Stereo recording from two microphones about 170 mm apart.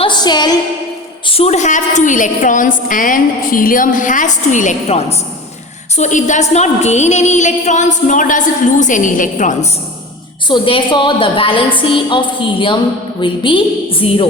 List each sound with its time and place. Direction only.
0.0 s a sound: 25° left (ahead or behind)
1.3 s a woman's voice: 40° left (ahead or behind)
10.5 s a woman's voice: 30° left (ahead or behind)